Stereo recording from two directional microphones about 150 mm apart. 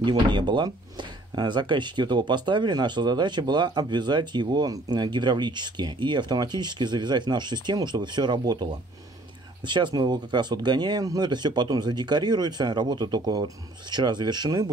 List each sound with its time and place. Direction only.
0.0 s speech: 30° right (ahead or behind)
9.7 s speech: 30° right (ahead or behind)